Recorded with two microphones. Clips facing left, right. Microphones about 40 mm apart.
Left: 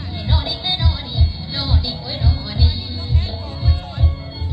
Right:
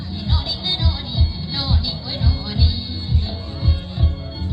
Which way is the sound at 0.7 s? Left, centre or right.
Centre.